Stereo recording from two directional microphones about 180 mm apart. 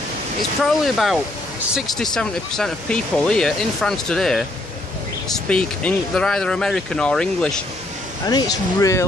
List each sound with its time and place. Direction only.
0.7 s speech: centre (ahead or behind)
5.5 s speech: 5° left (ahead or behind)
8.3 s speech: 20° left (ahead or behind)